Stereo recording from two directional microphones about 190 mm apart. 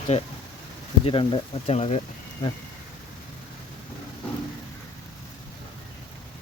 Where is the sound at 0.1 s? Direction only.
35° left (ahead or behind).